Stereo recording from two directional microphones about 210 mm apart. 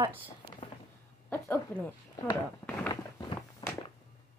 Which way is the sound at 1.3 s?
10° left (ahead or behind).